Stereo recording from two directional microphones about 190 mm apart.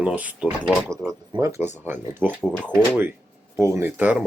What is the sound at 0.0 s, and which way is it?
Speech, 5° right (ahead or behind).